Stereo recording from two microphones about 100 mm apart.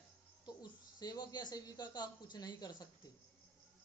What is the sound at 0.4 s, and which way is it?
Speech, 45° left (ahead or behind).